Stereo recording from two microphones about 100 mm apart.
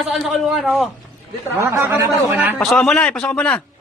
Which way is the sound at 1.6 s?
25° right (ahead or behind).